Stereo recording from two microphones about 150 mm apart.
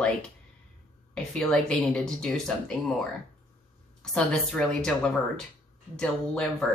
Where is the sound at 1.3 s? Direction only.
5° left (ahead or behind).